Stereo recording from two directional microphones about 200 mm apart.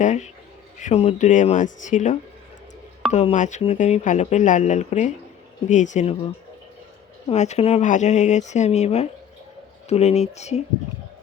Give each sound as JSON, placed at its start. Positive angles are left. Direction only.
{"t": 0.0, "sound": "speech", "side_deg": 35}
{"t": 7.3, "sound": "speech", "side_deg": 35}